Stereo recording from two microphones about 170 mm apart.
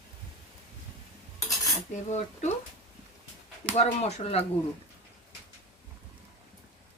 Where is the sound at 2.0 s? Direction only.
45° left (ahead or behind).